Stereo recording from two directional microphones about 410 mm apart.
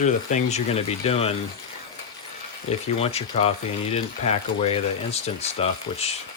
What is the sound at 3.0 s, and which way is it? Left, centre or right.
Speech, centre.